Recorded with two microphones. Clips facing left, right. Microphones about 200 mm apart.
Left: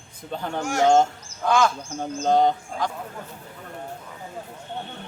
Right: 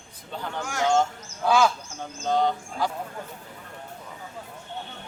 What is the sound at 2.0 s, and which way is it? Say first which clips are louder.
Speech: left 5 dB; 50° left (ahead or behind).